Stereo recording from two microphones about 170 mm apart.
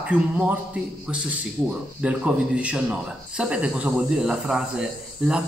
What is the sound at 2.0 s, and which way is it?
Speech, 5° right (ahead or behind).